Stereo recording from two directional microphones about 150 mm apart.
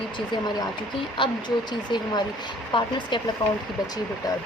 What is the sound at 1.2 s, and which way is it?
Speech, 35° left (ahead or behind).